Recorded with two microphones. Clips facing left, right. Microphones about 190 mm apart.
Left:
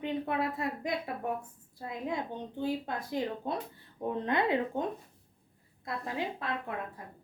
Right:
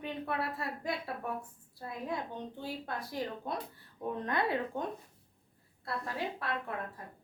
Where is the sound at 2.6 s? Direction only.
20° left (ahead or behind).